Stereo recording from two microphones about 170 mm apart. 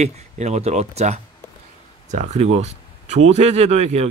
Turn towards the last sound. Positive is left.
turn(degrees=-40)  # may be behind; listen again after turning